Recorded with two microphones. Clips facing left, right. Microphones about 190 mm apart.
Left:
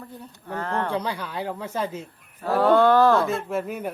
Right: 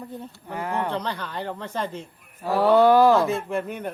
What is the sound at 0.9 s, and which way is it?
Speech, 10° left (ahead or behind).